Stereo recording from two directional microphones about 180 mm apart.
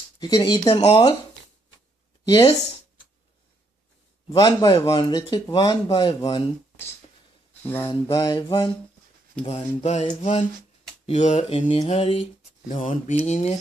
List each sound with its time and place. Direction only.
0.2 s speech: 25° left (ahead or behind)
2.2 s speech: 25° left (ahead or behind)
4.3 s speech: 25° left (ahead or behind)
7.8 s speech: 20° left (ahead or behind)
11.1 s speech: 40° left (ahead or behind)